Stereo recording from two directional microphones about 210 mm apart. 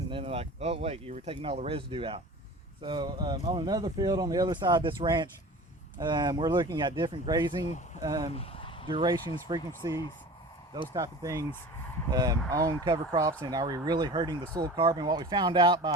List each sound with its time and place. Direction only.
0.1 s speech: 25° right (ahead or behind)
8.3 s a sound: 25° left (ahead or behind)
8.9 s speech: 20° right (ahead or behind)